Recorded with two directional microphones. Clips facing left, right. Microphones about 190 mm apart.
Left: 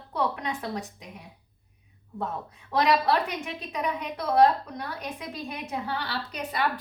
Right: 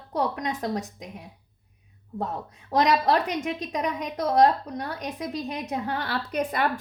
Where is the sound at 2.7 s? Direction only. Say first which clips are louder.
Right 2 dB; 40° right (ahead or behind).